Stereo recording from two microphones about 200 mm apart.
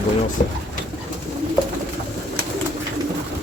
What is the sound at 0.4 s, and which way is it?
Speech, 40° left (ahead or behind).